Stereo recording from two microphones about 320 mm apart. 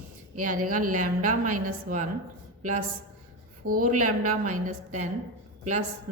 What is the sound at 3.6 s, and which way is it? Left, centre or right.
Speech, right.